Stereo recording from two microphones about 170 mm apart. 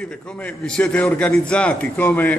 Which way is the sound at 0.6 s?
5° left (ahead or behind).